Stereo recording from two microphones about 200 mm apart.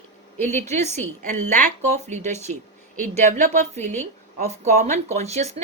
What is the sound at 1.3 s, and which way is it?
Speech, 35° right (ahead or behind).